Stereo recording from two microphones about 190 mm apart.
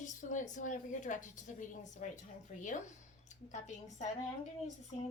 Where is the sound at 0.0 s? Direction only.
40° left (ahead or behind).